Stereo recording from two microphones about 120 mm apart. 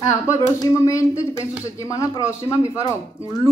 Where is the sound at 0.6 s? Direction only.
25° left (ahead or behind).